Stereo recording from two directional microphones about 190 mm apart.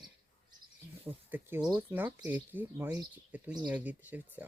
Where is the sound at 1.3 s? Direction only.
10° right (ahead or behind).